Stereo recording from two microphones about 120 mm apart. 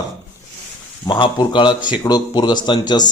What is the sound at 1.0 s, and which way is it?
A man's voice, 40° left (ahead or behind).